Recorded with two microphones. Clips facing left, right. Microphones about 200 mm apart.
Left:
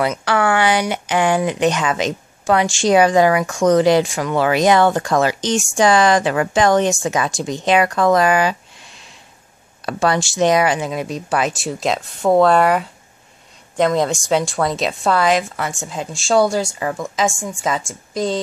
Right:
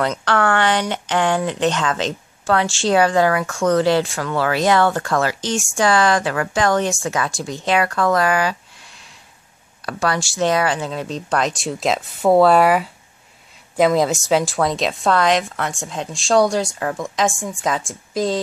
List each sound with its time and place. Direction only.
0.0 s a woman's voice: 10° left (ahead or behind)